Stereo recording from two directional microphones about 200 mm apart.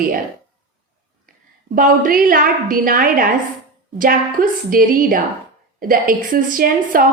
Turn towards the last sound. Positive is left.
turn(degrees=-45)  # may be behind; listen again after turning